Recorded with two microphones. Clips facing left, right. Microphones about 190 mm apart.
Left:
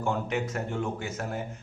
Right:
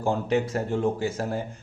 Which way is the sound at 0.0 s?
35° right (ahead or behind).